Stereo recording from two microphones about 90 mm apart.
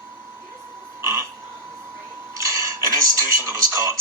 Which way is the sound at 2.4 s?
35° right (ahead or behind).